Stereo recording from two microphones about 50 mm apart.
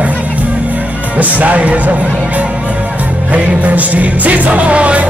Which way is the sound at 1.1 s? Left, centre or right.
Right.